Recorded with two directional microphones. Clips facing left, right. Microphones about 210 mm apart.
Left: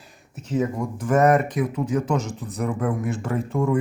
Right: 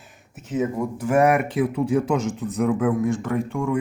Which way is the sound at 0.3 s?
Centre (ahead or behind).